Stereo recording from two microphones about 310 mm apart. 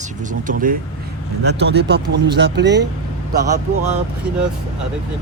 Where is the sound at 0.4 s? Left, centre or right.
Right.